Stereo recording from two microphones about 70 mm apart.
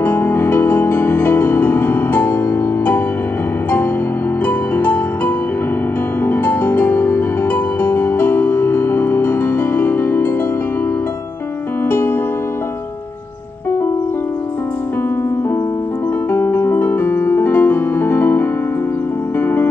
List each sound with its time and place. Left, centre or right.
0.0 s music: left
4.7 s music: left
11.9 s music: left
16.3 s music: left